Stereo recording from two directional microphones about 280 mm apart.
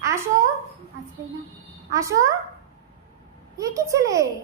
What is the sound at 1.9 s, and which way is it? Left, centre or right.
Speech, centre.